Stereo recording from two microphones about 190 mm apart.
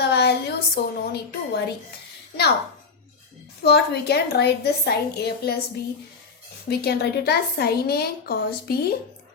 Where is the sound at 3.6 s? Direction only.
60° left (ahead or behind).